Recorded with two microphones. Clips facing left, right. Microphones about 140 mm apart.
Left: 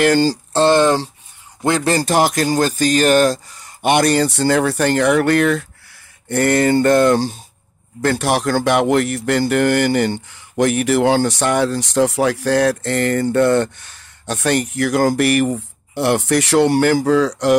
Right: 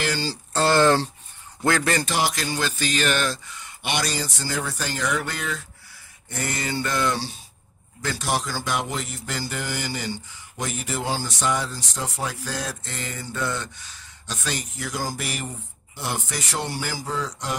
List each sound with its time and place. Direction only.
0.0 s speech: 50° left (ahead or behind)
0.5 s speech: 25° left (ahead or behind)
2.0 s speech: 50° left (ahead or behind)
8.0 s speech: 60° left (ahead or behind); by 17.6 s 80° left